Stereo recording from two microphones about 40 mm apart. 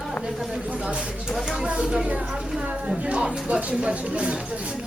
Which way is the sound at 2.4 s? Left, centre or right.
Centre.